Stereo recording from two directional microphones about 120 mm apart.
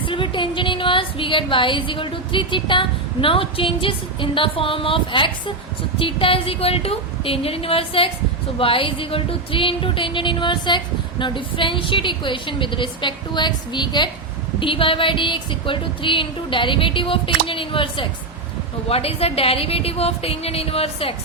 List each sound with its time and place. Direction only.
0.0 s a woman's voice: 45° left (ahead or behind)
6.0 s music: 50° left (ahead or behind)
18.9 s a woman's voice: 55° left (ahead or behind)